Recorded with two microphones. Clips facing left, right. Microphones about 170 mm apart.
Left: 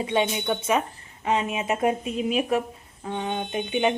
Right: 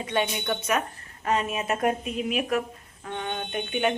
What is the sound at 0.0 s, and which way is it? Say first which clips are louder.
A woman's voice: left 3 dB; 20° left (ahead or behind).